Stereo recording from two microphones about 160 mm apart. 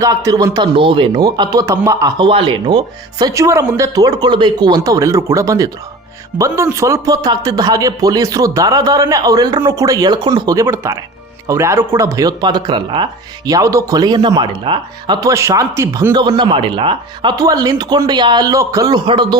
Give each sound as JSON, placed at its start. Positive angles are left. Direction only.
{"t": 0.0, "sound": "speech", "side_deg": -20}